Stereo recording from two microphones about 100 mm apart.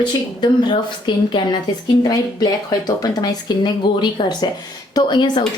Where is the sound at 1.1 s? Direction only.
50° left (ahead or behind).